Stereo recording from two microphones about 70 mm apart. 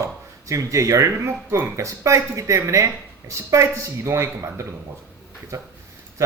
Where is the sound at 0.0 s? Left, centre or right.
Right.